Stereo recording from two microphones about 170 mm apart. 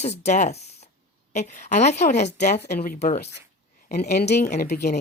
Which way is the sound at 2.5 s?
65° left (ahead or behind).